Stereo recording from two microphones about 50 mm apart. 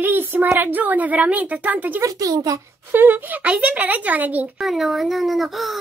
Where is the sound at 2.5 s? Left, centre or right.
Right.